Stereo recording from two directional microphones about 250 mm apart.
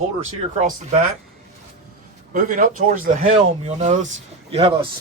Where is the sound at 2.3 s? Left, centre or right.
Right.